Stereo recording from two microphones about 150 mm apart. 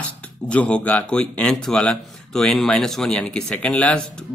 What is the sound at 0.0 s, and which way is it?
Speech, 10° left (ahead or behind).